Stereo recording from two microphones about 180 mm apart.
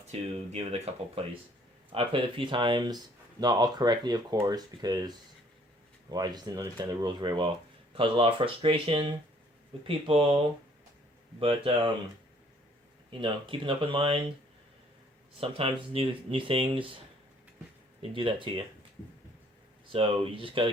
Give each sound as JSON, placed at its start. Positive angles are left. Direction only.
{"t": 0.1, "sound": "speech", "side_deg": -35}
{"t": 11.3, "sound": "speech", "side_deg": -30}
{"t": 13.1, "sound": "speech", "side_deg": -25}
{"t": 15.4, "sound": "speech", "side_deg": -30}
{"t": 18.0, "sound": "speech", "side_deg": -30}
{"t": 19.9, "sound": "speech", "side_deg": -30}